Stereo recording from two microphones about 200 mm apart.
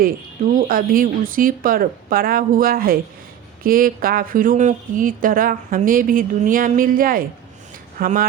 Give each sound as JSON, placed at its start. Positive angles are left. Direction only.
{"t": 0.7, "sound": "speech", "side_deg": -45}